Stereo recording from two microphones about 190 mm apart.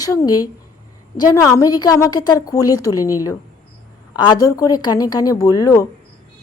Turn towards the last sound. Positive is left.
turn(degrees=15)  # may be behind; listen again after turning